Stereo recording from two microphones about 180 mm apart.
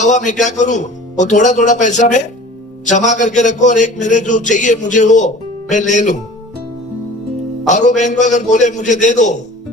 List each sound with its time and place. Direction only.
0.0 s a man's voice: 40° left (ahead or behind)
7.7 s a man's voice: 40° left (ahead or behind)